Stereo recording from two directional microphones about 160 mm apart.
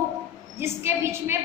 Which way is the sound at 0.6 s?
15° right (ahead or behind).